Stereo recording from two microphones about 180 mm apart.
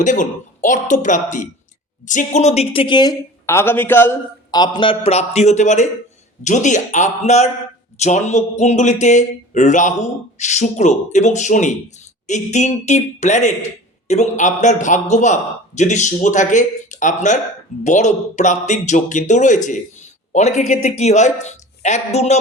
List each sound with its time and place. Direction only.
0.0 s a man's voice: 45° left (ahead or behind)